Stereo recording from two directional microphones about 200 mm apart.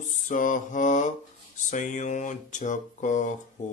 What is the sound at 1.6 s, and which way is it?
Speech, 40° left (ahead or behind).